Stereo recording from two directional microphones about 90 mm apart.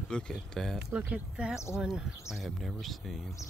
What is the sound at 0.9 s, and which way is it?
Speech, 10° right (ahead or behind).